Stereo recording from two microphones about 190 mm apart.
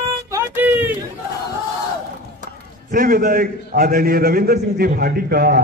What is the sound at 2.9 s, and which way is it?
A man's voice, 50° right (ahead or behind).